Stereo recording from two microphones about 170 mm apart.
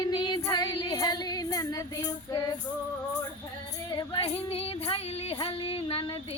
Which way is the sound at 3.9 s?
30° left (ahead or behind).